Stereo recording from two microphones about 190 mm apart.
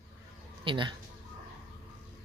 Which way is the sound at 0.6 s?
25° right (ahead or behind).